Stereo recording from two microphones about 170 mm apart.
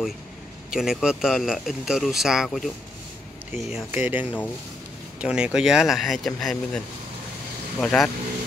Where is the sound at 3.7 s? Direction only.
10° right (ahead or behind).